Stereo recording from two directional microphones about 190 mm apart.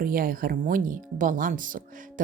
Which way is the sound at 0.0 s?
50° right (ahead or behind).